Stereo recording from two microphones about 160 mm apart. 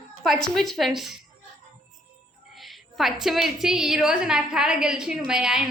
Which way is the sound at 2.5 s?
Centre (ahead or behind).